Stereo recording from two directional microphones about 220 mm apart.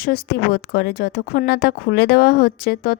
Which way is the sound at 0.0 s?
45° left (ahead or behind).